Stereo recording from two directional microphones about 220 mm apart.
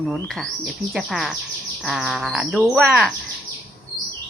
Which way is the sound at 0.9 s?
Centre (ahead or behind).